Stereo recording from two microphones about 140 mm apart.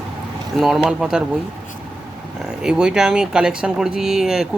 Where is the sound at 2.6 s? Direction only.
5° right (ahead or behind).